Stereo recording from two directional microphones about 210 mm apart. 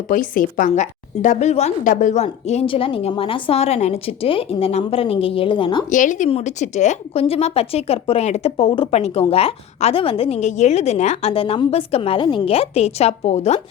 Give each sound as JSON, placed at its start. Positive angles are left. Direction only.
{"t": 0.1, "sound": "a woman's voice", "side_deg": 40}
{"t": 5.9, "sound": "a woman's voice", "side_deg": 35}